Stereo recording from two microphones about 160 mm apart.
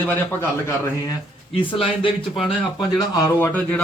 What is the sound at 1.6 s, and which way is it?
Speech, 35° left (ahead or behind).